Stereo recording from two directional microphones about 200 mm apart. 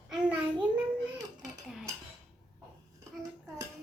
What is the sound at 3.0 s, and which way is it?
Dishes, 15° right (ahead or behind).